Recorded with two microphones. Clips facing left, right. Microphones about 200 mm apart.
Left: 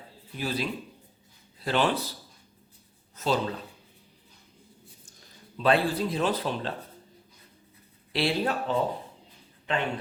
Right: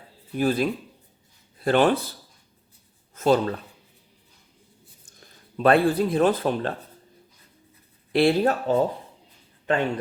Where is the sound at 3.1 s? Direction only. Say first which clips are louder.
Right 7 dB; 50° right (ahead or behind).